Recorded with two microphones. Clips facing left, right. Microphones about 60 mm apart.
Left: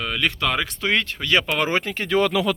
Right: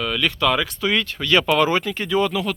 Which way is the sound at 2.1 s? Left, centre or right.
Left.